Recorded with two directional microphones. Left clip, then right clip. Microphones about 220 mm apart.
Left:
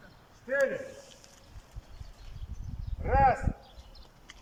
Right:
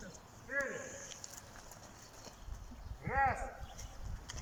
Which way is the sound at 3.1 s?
50° left (ahead or behind).